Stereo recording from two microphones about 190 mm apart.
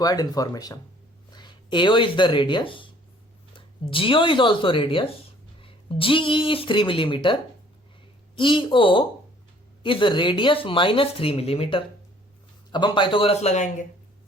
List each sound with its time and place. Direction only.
0.0 s speech: 20° left (ahead or behind)
8.4 s speech: 25° left (ahead or behind)